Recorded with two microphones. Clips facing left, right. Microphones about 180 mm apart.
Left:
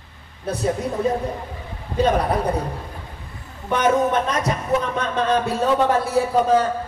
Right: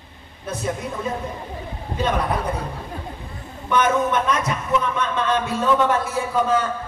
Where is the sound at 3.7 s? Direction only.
35° left (ahead or behind).